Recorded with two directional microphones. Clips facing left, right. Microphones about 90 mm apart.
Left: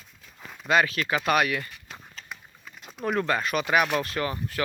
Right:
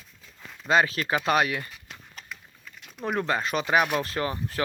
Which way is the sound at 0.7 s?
30° right (ahead or behind).